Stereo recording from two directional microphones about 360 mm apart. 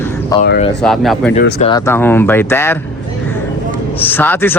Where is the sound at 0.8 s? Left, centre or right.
Centre.